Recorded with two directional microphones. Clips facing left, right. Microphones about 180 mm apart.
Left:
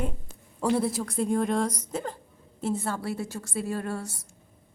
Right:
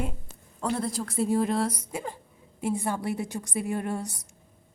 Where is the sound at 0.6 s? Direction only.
5° left (ahead or behind); by 4.3 s 20° right (ahead or behind).